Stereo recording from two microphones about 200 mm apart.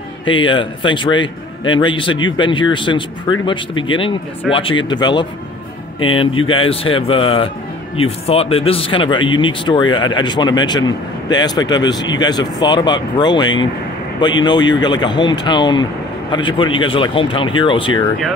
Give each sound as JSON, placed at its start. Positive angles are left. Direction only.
{"t": 0.2, "sound": "speech", "side_deg": 25}